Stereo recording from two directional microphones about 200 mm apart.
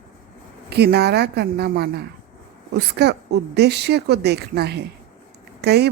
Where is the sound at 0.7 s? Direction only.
55° right (ahead or behind).